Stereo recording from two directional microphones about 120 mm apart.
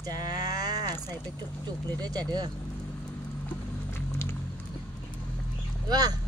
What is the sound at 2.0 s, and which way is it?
Speech, 35° right (ahead or behind).